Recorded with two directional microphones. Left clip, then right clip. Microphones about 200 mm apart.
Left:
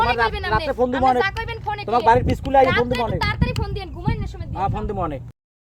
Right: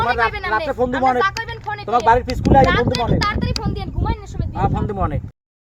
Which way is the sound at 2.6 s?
15° left (ahead or behind).